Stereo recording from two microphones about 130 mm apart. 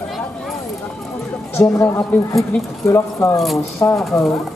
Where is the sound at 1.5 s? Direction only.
20° left (ahead or behind).